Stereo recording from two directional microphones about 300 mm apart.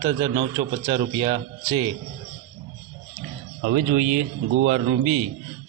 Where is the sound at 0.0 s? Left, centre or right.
Centre.